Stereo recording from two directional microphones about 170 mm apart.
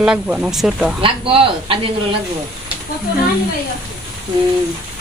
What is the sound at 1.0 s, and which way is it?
A woman's voice, 30° right (ahead or behind).